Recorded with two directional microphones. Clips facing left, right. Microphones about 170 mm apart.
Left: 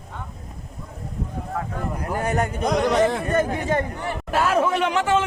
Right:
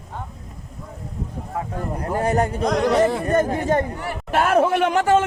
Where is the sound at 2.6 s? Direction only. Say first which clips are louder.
Even; centre (ahead or behind).